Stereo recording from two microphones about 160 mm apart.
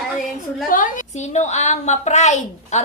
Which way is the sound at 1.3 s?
45° left (ahead or behind).